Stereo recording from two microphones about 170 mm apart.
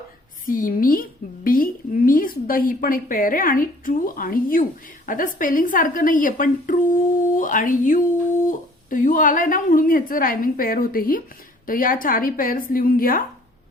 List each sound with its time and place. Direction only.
0.4 s a woman's voice: 55° left (ahead or behind)